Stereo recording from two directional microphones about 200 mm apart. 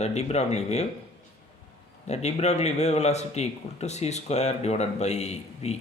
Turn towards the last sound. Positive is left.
turn(degrees=35)  # may be behind; listen again after turning